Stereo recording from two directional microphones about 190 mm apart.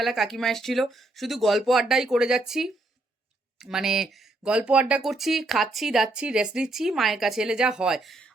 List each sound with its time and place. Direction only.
0.0 s speech: centre (ahead or behind)